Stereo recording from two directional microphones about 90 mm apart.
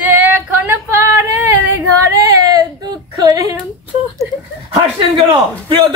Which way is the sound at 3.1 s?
40° right (ahead or behind).